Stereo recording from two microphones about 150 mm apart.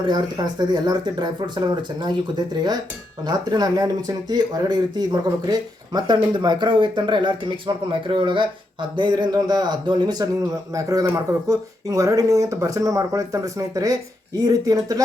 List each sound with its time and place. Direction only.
0.0 s speech: 30° right (ahead or behind)
3.2 s speech: 25° right (ahead or behind)